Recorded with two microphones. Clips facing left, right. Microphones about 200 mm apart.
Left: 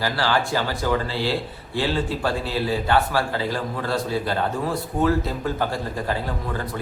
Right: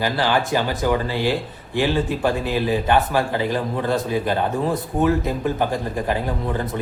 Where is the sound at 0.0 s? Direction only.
15° right (ahead or behind).